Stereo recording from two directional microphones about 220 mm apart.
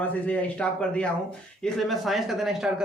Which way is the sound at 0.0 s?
5° left (ahead or behind).